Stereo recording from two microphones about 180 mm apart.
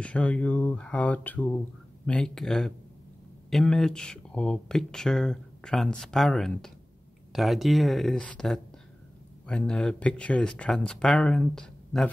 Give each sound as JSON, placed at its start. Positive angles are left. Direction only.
{"t": 0.0, "sound": "speech", "side_deg": 5}